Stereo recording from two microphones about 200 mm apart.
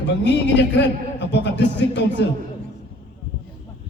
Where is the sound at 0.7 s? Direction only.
60° left (ahead or behind).